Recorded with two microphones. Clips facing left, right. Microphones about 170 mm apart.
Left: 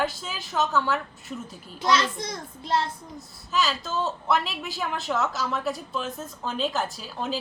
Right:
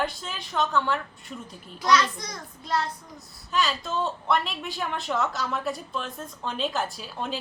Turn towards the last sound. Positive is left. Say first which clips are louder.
# left 2 dB
turn(degrees=0)  # may be behind; listen again after turning